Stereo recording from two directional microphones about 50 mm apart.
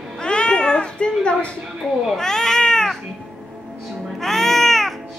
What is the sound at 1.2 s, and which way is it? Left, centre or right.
Speech, left.